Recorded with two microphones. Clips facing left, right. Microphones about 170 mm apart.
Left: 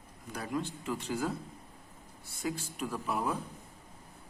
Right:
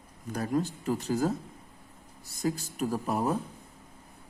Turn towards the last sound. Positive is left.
turn(degrees=-40)  # may be behind; listen again after turning